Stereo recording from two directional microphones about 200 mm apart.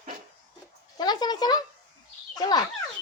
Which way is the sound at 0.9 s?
20° left (ahead or behind).